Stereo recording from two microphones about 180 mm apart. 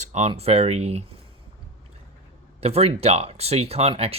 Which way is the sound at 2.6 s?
35° right (ahead or behind).